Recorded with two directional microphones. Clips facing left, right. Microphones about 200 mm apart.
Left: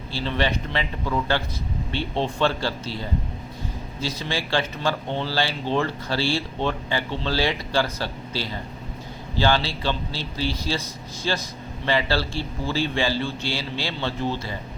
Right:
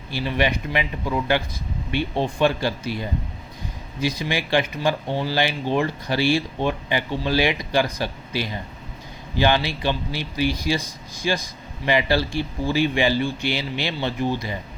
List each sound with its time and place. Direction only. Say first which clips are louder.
0.1 s speech: right 2 dB; 15° right (ahead or behind)